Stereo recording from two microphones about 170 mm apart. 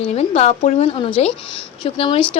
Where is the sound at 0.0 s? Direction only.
40° left (ahead or behind).